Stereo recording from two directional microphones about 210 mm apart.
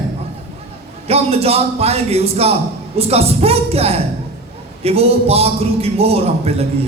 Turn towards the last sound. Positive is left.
turn(degrees=-30)  # may be behind; listen again after turning